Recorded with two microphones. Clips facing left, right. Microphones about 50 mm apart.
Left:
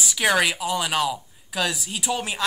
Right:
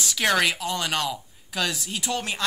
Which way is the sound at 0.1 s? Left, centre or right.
Centre.